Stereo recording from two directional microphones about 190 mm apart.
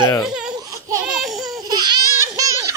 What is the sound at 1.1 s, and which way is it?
Laughter, centre (ahead or behind).